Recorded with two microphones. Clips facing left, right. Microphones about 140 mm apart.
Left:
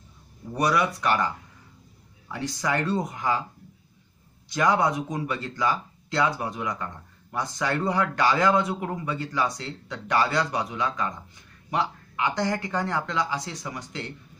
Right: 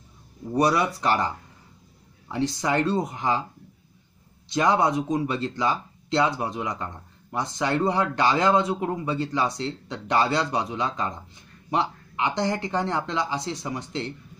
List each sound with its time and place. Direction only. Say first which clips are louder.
0.6 s speech: right 2 dB; 30° right (ahead or behind)
2.3 s speech: right 4 dB; 25° right (ahead or behind)
4.5 s speech: right 1 dB; 25° right (ahead or behind)